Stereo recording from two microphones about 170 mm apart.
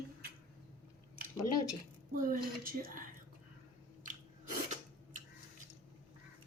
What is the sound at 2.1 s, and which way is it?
Speech, 55° right (ahead or behind).